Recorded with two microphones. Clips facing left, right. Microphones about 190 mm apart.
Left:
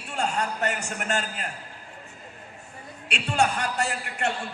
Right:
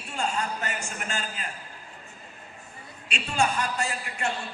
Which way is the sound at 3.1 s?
70° left (ahead or behind).